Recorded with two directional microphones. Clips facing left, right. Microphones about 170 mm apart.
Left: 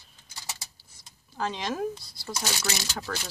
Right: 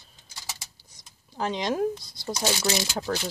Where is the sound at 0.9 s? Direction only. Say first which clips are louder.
Right 1 dB; 15° right (ahead or behind).